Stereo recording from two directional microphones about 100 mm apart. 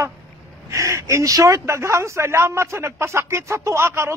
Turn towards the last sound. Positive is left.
turn(degrees=-25)  # may be behind; listen again after turning